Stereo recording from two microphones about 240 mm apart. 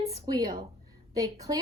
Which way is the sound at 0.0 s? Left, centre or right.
Centre.